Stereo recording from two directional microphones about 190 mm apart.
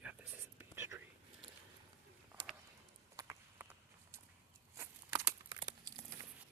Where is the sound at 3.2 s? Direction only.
20° right (ahead or behind).